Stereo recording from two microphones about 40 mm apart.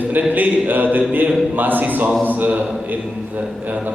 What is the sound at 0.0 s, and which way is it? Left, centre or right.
A woman's voice, right.